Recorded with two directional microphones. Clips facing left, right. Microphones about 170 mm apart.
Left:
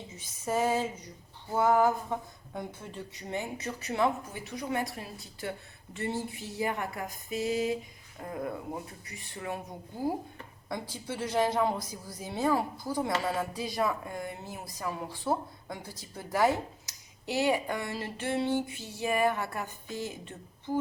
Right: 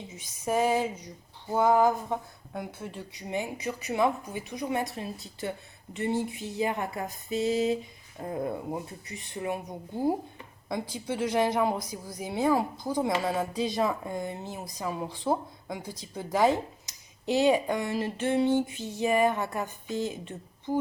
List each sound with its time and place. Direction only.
0.2 s speech: 15° right (ahead or behind)
10.7 s speech: 15° right (ahead or behind)